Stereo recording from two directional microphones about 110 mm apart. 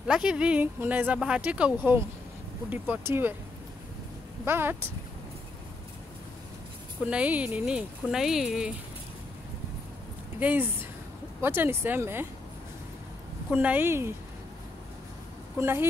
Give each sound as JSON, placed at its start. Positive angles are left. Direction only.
{"t": 0.0, "sound": "speech", "side_deg": -5}
{"t": 4.5, "sound": "speech", "side_deg": -20}
{"t": 7.1, "sound": "speech", "side_deg": -10}
{"t": 10.4, "sound": "speech", "side_deg": -20}
{"t": 13.5, "sound": "speech", "side_deg": -15}
{"t": 15.6, "sound": "speech", "side_deg": -20}